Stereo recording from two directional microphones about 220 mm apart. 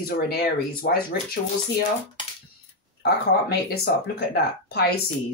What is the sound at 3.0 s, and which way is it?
Speech, 45° left (ahead or behind).